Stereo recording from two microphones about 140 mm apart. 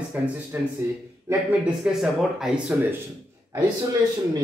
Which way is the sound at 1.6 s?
5° right (ahead or behind).